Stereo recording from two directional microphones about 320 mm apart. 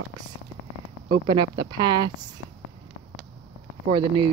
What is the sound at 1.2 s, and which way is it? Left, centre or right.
Speech, centre.